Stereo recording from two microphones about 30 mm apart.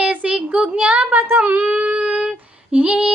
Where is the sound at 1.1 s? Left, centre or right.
Right.